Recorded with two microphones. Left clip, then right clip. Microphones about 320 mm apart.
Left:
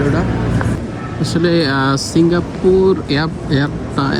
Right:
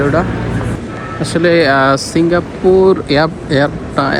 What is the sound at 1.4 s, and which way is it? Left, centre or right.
Speech, centre.